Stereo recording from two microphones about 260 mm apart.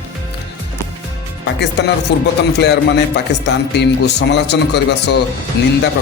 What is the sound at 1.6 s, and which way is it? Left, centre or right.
A man's voice, left.